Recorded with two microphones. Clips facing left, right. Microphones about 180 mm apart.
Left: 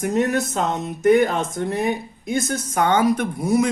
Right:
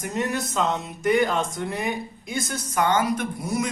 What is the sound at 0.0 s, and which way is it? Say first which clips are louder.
Speech: left 7 dB; 45° left (ahead or behind).